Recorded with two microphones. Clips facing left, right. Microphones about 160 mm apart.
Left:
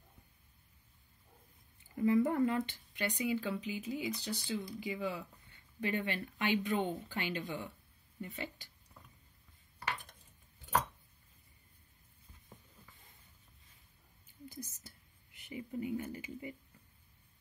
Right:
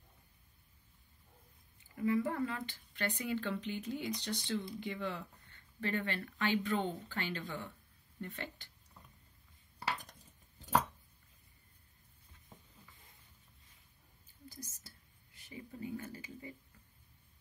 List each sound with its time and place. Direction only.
2.0 s speech: 25° left (ahead or behind)
2.7 s speech: 15° left (ahead or behind)
9.8 s cutlery: 40° right (ahead or behind)
15.5 s speech: 15° left (ahead or behind)